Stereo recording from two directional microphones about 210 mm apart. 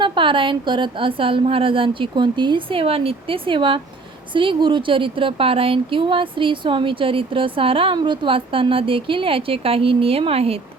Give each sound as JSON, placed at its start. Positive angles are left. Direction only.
{"t": 0.0, "sound": "a woman's voice", "side_deg": -25}